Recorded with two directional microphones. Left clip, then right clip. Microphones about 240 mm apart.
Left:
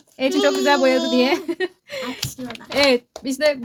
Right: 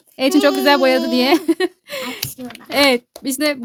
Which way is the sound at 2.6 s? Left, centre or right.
Right.